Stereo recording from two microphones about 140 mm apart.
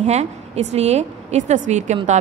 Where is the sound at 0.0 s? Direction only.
50° right (ahead or behind).